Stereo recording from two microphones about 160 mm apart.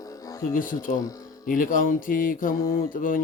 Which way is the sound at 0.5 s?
60° left (ahead or behind).